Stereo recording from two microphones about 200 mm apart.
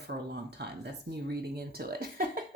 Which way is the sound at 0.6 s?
55° right (ahead or behind).